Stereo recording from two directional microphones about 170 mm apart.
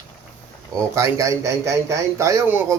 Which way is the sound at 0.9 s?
15° right (ahead or behind).